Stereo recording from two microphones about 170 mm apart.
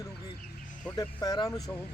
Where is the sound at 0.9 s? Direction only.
25° left (ahead or behind).